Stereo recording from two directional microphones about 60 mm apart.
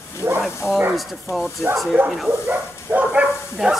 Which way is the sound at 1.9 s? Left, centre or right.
Right.